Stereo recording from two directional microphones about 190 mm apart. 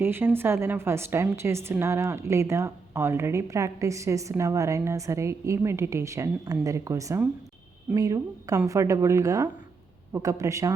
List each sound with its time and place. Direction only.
0.0 s a woman's voice: 10° right (ahead or behind)